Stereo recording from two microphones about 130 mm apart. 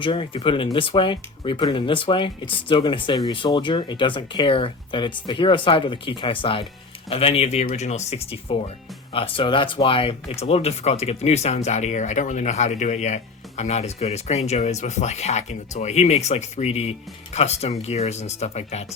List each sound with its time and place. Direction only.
0.0 s speech: 40° left (ahead or behind)